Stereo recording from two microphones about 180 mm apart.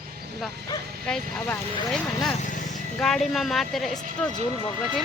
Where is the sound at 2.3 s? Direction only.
45° left (ahead or behind).